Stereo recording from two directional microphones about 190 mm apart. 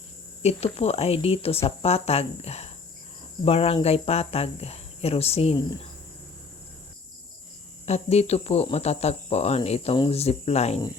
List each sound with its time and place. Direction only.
0.4 s speech: 35° left (ahead or behind)
7.9 s speech: 35° left (ahead or behind)